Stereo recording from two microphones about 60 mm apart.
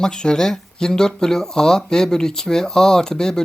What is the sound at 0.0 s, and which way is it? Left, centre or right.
Speech, centre.